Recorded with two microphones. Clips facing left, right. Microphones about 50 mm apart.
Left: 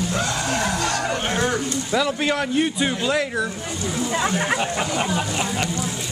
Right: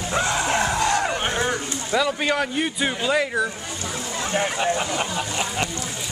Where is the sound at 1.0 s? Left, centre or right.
Centre.